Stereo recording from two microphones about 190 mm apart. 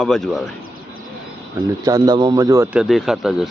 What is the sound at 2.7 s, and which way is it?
Speech, centre (ahead or behind).